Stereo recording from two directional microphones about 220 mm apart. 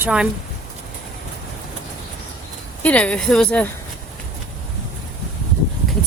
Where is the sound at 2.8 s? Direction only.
5° left (ahead or behind).